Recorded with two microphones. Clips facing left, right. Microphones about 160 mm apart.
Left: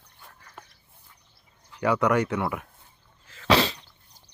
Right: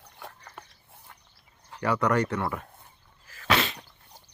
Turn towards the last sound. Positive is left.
turn(degrees=30)  # may be behind; listen again after turning